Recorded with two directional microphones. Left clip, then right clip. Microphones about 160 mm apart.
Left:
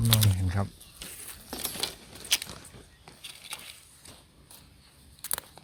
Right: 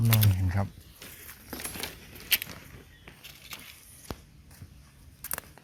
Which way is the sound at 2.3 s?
65° left (ahead or behind).